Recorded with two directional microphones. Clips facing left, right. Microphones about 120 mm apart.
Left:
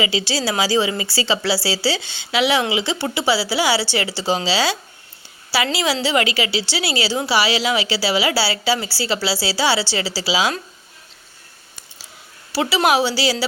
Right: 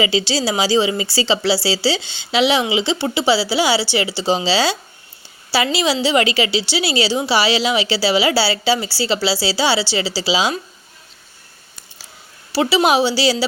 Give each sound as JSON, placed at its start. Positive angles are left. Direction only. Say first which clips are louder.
{"t": 0.0, "sound": "a woman's voice", "louder": "right 3 dB", "side_deg": -30}
{"t": 12.5, "sound": "a woman's voice", "louder": "right 2 dB", "side_deg": -20}